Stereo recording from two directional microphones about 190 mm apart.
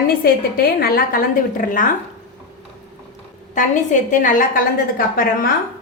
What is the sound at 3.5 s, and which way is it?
A woman's voice, 40° left (ahead or behind).